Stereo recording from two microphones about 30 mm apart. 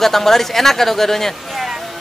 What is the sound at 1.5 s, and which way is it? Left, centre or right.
Music, centre.